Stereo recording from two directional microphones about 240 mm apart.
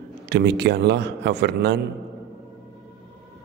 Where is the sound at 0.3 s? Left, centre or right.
Right.